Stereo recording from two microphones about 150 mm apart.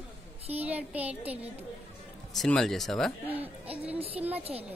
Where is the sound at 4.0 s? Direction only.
40° right (ahead or behind).